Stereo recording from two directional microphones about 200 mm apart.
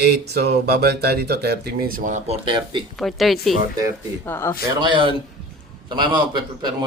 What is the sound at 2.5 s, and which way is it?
Speech, 25° right (ahead or behind).